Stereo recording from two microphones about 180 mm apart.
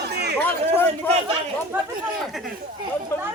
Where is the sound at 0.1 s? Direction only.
65° right (ahead or behind).